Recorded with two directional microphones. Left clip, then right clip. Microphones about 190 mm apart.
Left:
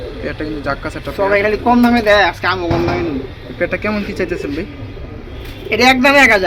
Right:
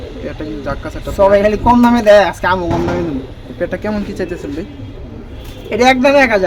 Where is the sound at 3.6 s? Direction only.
5° right (ahead or behind).